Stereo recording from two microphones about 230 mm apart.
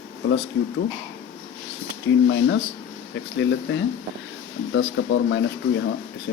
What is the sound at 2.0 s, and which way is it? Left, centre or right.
Speech, left.